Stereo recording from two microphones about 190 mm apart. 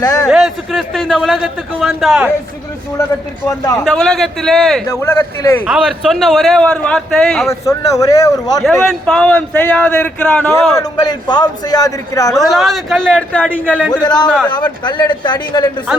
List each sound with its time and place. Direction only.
0.0 s a man's voice: 20° left (ahead or behind)
0.3 s a man's voice: centre (ahead or behind)
3.8 s a man's voice: centre (ahead or behind)
4.9 s speech: 15° left (ahead or behind)
5.6 s a man's voice: 5° right (ahead or behind)
7.4 s a man's voice: 15° left (ahead or behind)
8.9 s speech: 5° left (ahead or behind)
11.0 s a man's voice: 25° left (ahead or behind)
12.4 s a man's voice: centre (ahead or behind)
14.0 s a man's voice: 20° left (ahead or behind)
14.3 s a man's voice: 5° left (ahead or behind)
14.5 s a man's voice: 25° left (ahead or behind)